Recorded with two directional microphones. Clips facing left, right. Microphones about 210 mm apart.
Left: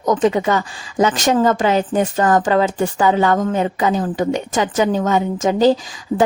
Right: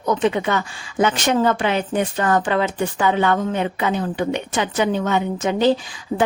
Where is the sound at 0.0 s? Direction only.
40° left (ahead or behind).